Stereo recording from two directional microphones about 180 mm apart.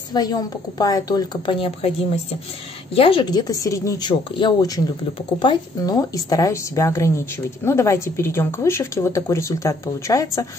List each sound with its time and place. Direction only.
0.1 s a woman's voice: 20° left (ahead or behind)